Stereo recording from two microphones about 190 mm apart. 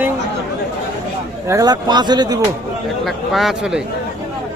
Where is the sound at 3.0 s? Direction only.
Centre (ahead or behind).